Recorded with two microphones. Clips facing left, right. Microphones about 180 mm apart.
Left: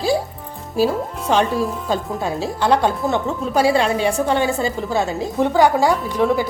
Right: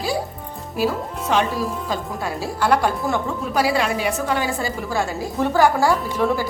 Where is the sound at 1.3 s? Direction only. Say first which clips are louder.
Left 3 dB; 35° left (ahead or behind).